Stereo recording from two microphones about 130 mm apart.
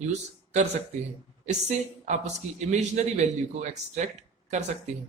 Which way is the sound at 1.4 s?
60° right (ahead or behind).